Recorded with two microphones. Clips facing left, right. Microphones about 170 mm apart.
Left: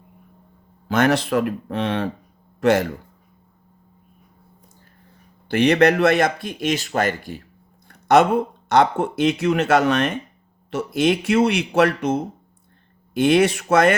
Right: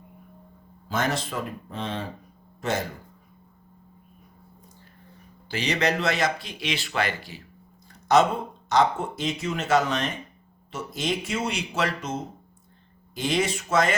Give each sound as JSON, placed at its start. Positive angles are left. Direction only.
{"t": 0.9, "sound": "a man's voice", "side_deg": 65}
{"t": 5.5, "sound": "speech", "side_deg": 60}